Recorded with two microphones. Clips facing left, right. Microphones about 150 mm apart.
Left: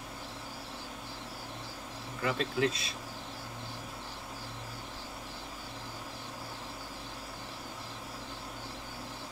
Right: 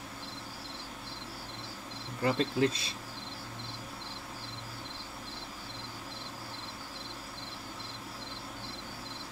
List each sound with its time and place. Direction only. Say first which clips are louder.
2.2 s insect: right 2 dB; 35° right (ahead or behind)